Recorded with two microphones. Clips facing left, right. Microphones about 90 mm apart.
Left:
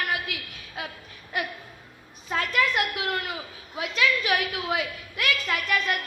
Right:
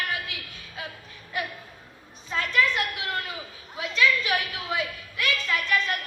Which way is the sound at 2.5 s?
30° right (ahead or behind).